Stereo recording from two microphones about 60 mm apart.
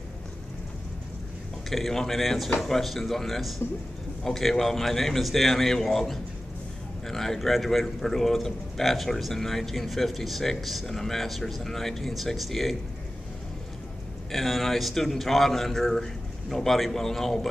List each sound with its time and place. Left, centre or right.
1.7 s a man's voice: centre
14.3 s a man's voice: centre